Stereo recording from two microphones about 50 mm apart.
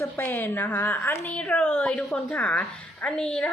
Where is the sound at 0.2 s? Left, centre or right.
Left.